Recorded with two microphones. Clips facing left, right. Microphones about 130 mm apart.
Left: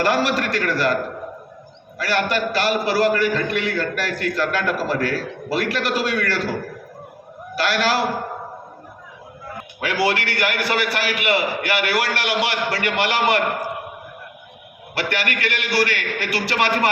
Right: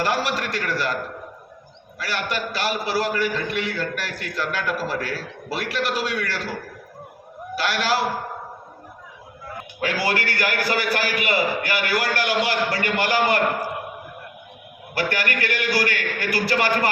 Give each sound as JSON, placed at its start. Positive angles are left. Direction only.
{"t": 0.0, "sound": "a man's voice", "side_deg": 90}
{"t": 2.0, "sound": "a man's voice", "side_deg": 85}
{"t": 7.5, "sound": "a man's voice", "side_deg": 90}
{"t": 9.8, "sound": "a man's voice", "side_deg": 65}
{"t": 14.9, "sound": "a man's voice", "side_deg": 70}